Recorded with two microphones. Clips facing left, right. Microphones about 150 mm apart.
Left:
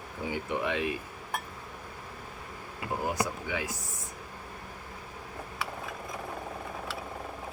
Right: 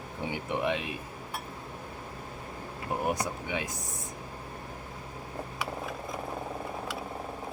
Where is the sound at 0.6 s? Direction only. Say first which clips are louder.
Right 2 dB; 20° right (ahead or behind).